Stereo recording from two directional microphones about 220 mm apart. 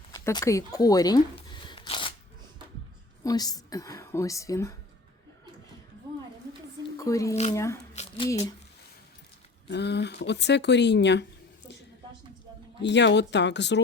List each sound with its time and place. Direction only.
0.1 s speech: 15° left (ahead or behind)
3.2 s a woman's voice: 15° left (ahead or behind)
6.9 s a woman's voice: 15° left (ahead or behind)
8.0 s squish: 30° left (ahead or behind)
9.6 s speech: 50° left (ahead or behind)
12.8 s speech: 55° left (ahead or behind)